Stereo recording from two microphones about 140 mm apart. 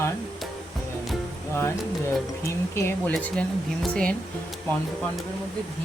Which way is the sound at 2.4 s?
15° left (ahead or behind).